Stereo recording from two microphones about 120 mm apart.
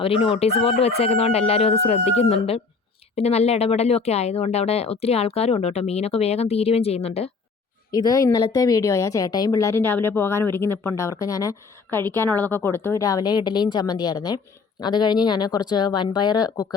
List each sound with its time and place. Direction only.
0.0 s speech: 50° left (ahead or behind)
7.9 s a woman's voice: 30° left (ahead or behind)
11.9 s a woman's voice: 15° left (ahead or behind); by 16.6 s 35° left (ahead or behind)